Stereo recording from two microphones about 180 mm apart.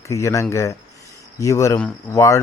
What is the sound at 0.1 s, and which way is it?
Speech, 15° left (ahead or behind).